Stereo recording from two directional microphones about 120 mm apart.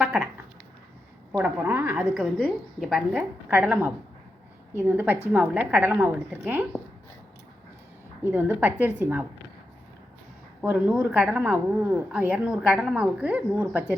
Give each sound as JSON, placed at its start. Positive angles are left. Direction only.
{"t": 0.0, "sound": "a sound", "side_deg": -5}
{"t": 1.3, "sound": "a woman's voice", "side_deg": -15}
{"t": 2.4, "sound": "a woman's voice", "side_deg": 0}
{"t": 3.1, "sound": "a woman's voice", "side_deg": -15}
{"t": 8.2, "sound": "a woman's voice", "side_deg": -15}
{"t": 10.6, "sound": "a woman's voice", "side_deg": -10}